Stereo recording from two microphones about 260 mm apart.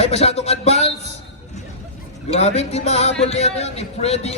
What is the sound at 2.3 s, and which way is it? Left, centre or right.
Speech, left.